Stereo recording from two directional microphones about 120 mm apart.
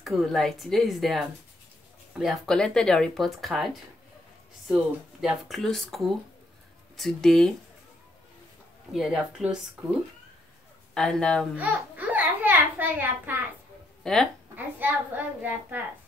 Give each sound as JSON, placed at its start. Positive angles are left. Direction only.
{"t": 0.0, "sound": "speech", "side_deg": 0}
{"t": 8.9, "sound": "speech", "side_deg": -5}
{"t": 11.0, "sound": "a woman's voice", "side_deg": 5}
{"t": 11.5, "sound": "babbling", "side_deg": -15}
{"t": 14.0, "sound": "speech", "side_deg": 5}
{"t": 14.5, "sound": "speech", "side_deg": -15}